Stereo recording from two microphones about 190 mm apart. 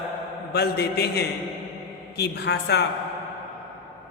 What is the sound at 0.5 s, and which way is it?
A man's voice, 55° left (ahead or behind).